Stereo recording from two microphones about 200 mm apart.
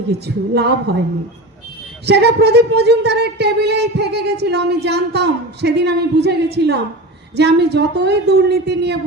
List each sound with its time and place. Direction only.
0.1 s a woman's voice: 55° right (ahead or behind)
2.0 s a woman's voice: 55° right (ahead or behind)